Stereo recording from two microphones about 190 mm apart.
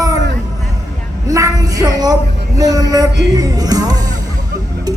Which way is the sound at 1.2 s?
15° right (ahead or behind).